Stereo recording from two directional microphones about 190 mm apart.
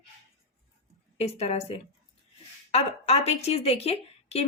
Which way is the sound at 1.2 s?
35° left (ahead or behind).